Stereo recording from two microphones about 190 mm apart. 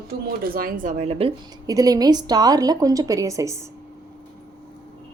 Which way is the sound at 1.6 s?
20° right (ahead or behind).